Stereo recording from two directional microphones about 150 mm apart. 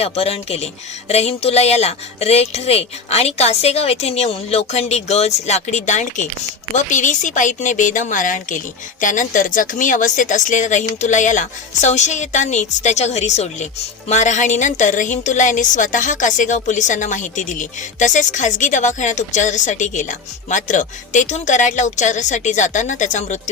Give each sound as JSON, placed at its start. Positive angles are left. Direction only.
{"t": 0.0, "sound": "a woman's voice", "side_deg": 40}